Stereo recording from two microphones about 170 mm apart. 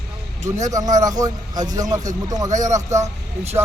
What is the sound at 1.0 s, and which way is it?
Speech, 20° right (ahead or behind).